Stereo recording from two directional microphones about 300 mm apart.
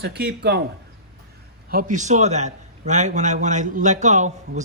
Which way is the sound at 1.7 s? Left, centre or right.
Right.